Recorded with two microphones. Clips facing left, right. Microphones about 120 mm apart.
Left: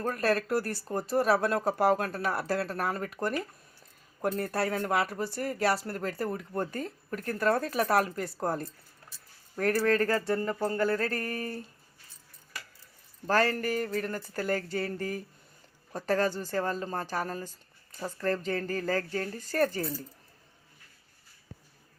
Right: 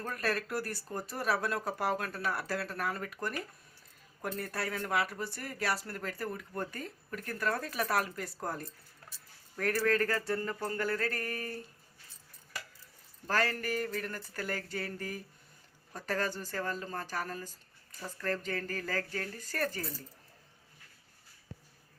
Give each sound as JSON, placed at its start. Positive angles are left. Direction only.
{"t": 0.0, "sound": "speech", "side_deg": 35}
{"t": 13.2, "sound": "speech", "side_deg": 30}